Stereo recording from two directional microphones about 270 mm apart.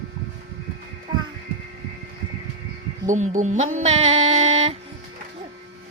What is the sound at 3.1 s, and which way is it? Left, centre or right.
Speech, right.